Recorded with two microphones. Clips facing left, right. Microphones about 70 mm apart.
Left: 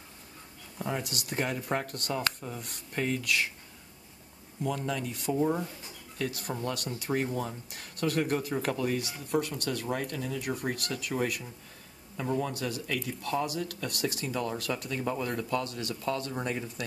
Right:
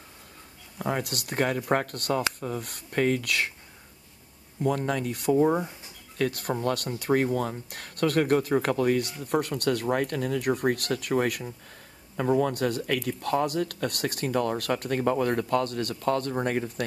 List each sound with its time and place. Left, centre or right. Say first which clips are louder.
0.8 s speech: right 5 dB; right
4.6 s speech: right 6 dB; right
5.5 s speech: right 5 dB; right
6.1 s speech: right 6 dB; right